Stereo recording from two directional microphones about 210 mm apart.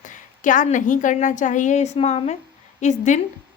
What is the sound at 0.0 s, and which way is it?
A woman's voice, 35° left (ahead or behind).